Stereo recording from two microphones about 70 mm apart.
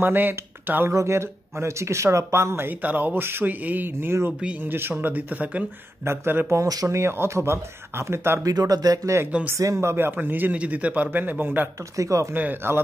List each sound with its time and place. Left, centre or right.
0.0 s speech: right
0.9 s speech: right
2.8 s a man's voice: right
6.0 s speech: right
6.6 s speech: right
7.0 s speech: right
8.5 s a man's voice: right
12.0 s speech: right
12.4 s a man's voice: right